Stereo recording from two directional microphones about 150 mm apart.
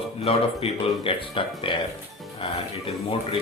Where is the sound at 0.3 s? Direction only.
40° left (ahead or behind).